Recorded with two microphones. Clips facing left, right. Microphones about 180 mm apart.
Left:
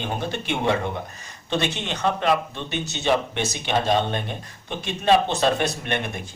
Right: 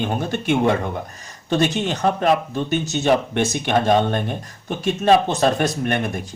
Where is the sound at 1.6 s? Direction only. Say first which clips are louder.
Right 6 dB; 40° right (ahead or behind).